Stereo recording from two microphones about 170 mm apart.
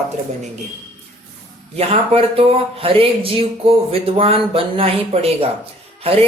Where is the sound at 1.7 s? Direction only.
35° right (ahead or behind).